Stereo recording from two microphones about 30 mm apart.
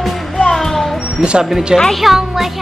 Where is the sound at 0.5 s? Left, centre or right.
Centre.